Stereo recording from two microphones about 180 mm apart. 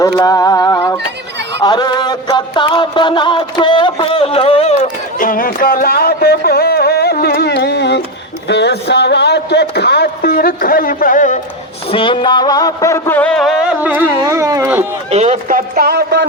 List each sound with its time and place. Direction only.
0.2 s a sound: 20° left (ahead or behind)
1.6 s music: 25° left (ahead or behind)
5.2 s music: 50° left (ahead or behind); by 8.0 s 70° left (ahead or behind)
8.4 s speech: 70° left (ahead or behind); by 11.3 s 45° left (ahead or behind)
11.9 s a sound: 30° left (ahead or behind); by 14.0 s 5° right (ahead or behind)
14.3 s speech: 15° right (ahead or behind)
15.1 s speech: 40° right (ahead or behind); by 16.2 s 60° right (ahead or behind)